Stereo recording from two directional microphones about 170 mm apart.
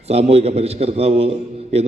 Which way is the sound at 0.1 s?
40° right (ahead or behind).